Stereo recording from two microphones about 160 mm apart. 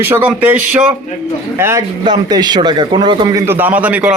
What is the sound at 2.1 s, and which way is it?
A man's voice, 25° right (ahead or behind).